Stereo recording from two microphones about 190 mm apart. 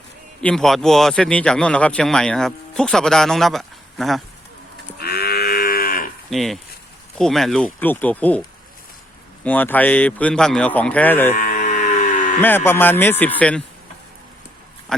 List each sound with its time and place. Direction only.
0.4 s speech: centre (ahead or behind)
4.9 s cattle: 55° left (ahead or behind)
6.3 s speech: centre (ahead or behind)
11.3 s a sound: 45° left (ahead or behind)
12.4 s speech: 10° left (ahead or behind)